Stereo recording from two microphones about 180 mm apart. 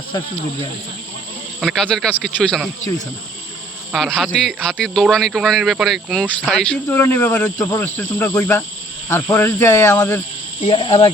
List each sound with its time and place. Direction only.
1.6 s speech: centre (ahead or behind)
3.9 s speech: centre (ahead or behind)
6.6 s speech: 5° left (ahead or behind)
10.6 s speech: 30° left (ahead or behind)